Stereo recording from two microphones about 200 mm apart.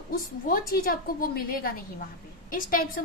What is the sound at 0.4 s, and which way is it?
A woman's voice, 45° left (ahead or behind).